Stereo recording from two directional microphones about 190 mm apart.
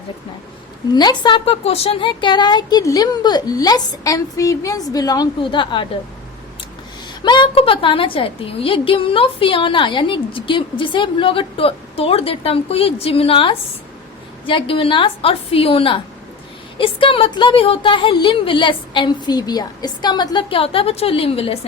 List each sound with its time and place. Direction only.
0.9 s a woman's voice: 25° left (ahead or behind)
7.2 s a woman's voice: 25° left (ahead or behind)